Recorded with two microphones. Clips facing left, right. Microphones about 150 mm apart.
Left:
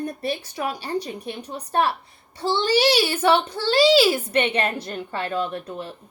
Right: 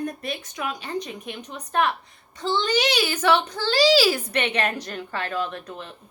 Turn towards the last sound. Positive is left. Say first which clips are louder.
# left 3 dB
turn(degrees=30)  # may be behind; listen again after turning